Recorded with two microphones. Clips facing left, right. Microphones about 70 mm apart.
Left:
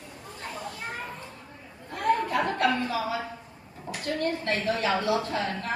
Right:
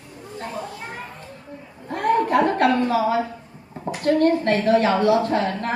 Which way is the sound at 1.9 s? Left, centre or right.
Right.